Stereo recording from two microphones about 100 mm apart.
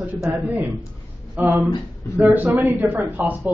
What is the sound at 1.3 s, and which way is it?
A man's voice, 20° right (ahead or behind).